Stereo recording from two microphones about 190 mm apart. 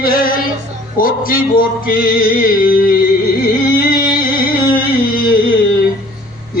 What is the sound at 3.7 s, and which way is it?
Music, 50° left (ahead or behind).